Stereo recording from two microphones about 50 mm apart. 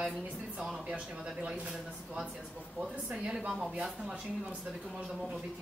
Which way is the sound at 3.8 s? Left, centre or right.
Centre.